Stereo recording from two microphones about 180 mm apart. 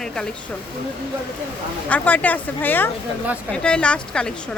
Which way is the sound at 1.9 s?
10° left (ahead or behind).